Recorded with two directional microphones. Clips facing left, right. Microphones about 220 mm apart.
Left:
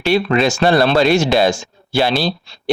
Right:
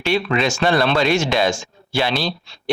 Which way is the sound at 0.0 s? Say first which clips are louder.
Left 4 dB; 40° left (ahead or behind).